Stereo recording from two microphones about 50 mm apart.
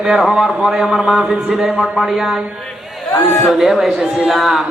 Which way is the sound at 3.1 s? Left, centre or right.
Left.